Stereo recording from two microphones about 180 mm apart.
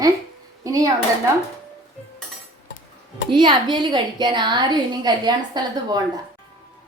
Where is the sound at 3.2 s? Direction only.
25° right (ahead or behind).